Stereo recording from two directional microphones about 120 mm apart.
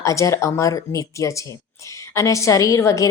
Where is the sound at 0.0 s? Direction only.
25° left (ahead or behind).